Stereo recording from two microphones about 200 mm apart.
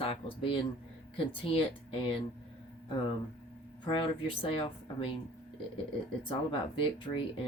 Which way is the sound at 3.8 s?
25° left (ahead or behind).